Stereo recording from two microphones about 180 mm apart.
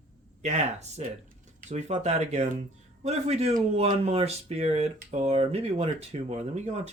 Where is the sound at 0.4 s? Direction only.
40° right (ahead or behind).